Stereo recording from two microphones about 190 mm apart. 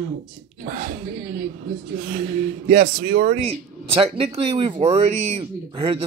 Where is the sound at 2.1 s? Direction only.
45° right (ahead or behind).